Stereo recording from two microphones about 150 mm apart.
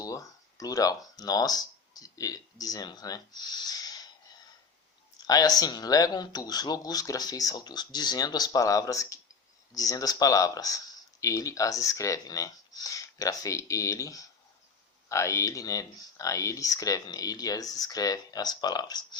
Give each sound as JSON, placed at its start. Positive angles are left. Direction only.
{"t": 0.0, "sound": "speech", "side_deg": 20}
{"t": 3.7, "sound": "a sound", "side_deg": 25}
{"t": 5.2, "sound": "speech", "side_deg": 25}